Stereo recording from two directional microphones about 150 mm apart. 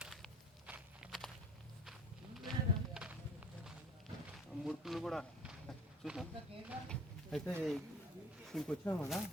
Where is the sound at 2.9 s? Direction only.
5° right (ahead or behind).